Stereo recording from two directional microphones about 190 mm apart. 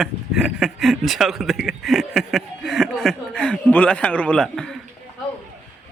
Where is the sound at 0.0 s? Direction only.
Centre (ahead or behind).